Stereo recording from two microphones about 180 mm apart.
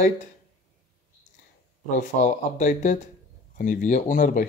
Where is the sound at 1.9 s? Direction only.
45° left (ahead or behind).